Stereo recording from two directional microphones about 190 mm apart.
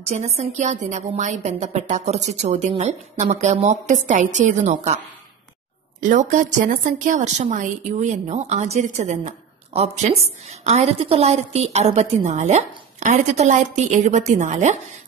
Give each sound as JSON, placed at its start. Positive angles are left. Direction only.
{"t": 0.1, "sound": "a woman's voice", "side_deg": -35}
{"t": 6.0, "sound": "a woman's voice", "side_deg": -40}